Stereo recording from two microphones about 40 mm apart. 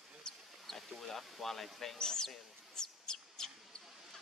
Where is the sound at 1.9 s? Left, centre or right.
Centre.